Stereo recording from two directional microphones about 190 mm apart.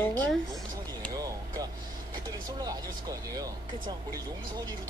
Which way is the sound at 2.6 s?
20° right (ahead or behind).